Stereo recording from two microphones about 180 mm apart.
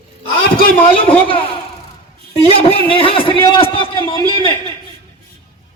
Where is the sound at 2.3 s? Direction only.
30° left (ahead or behind).